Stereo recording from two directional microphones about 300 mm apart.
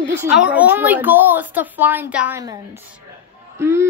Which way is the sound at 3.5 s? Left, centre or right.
Centre.